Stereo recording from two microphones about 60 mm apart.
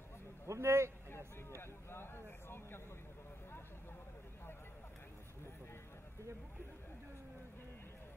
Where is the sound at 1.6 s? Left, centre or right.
Left.